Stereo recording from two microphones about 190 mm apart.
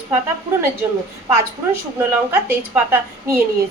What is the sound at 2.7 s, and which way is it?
Speech, 10° right (ahead or behind).